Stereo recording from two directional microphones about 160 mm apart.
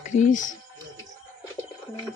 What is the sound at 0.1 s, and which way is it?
Speech, 50° left (ahead or behind).